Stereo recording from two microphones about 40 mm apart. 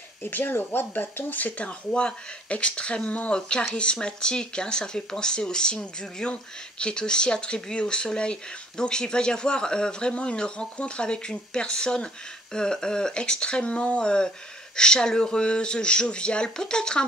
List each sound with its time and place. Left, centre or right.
0.2 s speech: left
1.4 s speech: left
3.3 s speech: left